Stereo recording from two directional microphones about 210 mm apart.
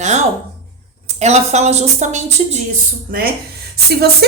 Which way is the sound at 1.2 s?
30° right (ahead or behind).